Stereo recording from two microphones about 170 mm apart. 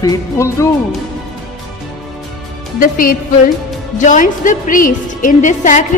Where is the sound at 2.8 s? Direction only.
55° left (ahead or behind).